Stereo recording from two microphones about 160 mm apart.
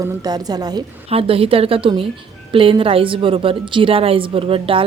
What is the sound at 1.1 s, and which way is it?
A woman's voice, 35° right (ahead or behind).